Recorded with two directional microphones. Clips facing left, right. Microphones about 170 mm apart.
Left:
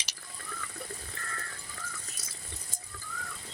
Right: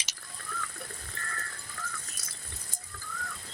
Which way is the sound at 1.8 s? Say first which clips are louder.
Right 4 dB; 20° left (ahead or behind).